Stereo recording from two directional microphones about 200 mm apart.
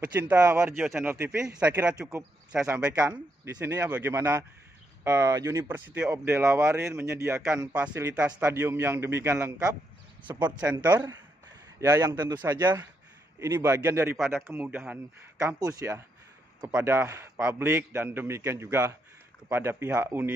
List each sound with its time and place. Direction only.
0.0 s speech: 10° right (ahead or behind)
1.1 s a man's voice: 15° right (ahead or behind)
14.1 s a man's voice: centre (ahead or behind)